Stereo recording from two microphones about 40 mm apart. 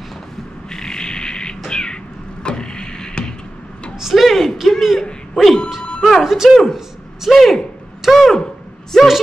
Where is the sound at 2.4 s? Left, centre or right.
Left.